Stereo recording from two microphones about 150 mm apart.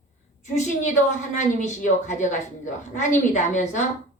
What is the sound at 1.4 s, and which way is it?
A woman's voice, 55° left (ahead or behind).